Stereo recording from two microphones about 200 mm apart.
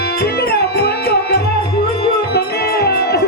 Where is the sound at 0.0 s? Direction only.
50° left (ahead or behind).